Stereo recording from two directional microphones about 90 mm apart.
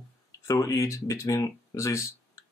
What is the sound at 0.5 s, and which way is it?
Speech, 40° left (ahead or behind).